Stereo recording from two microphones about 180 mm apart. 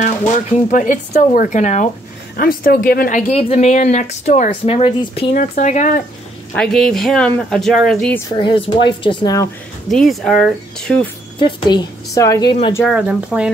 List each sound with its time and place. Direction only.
0.5 s speech: 45° left (ahead or behind)
2.3 s speech: 55° left (ahead or behind); by 5.3 s 35° left (ahead or behind)
5.3 s speech: 45° left (ahead or behind)
6.5 s speech: 5° left (ahead or behind)
8.3 s a woman's voice: 25° left (ahead or behind)
9.8 s speech: centre (ahead or behind)
11.3 s a woman's voice: 25° left (ahead or behind)
12.8 s speech: 5° right (ahead or behind)